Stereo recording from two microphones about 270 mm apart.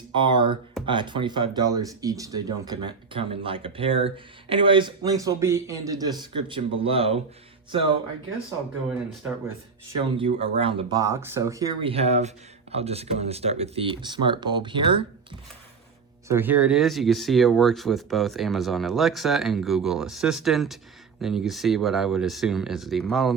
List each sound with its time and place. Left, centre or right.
0.1 s speech: centre
10.2 s speech: right
16.3 s speech: centre